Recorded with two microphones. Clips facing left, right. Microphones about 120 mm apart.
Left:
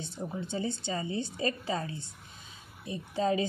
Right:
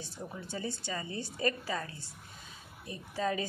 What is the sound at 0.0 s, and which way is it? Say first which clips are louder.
A woman's voice: left 6 dB; 25° left (ahead or behind).